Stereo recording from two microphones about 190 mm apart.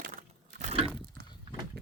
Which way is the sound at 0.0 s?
45° right (ahead or behind).